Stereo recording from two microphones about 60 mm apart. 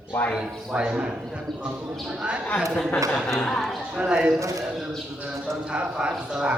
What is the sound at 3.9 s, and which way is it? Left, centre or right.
Speech, centre.